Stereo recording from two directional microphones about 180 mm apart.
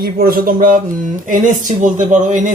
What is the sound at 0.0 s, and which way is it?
Speech, 55° right (ahead or behind).